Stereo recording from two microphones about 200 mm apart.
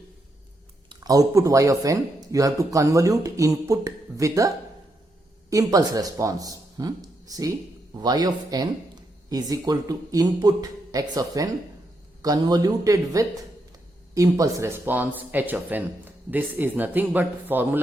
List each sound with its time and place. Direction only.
0.9 s a man's voice: 20° right (ahead or behind)